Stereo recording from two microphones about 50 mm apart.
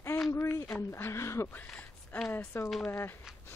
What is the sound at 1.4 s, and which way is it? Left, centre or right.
Speech, left.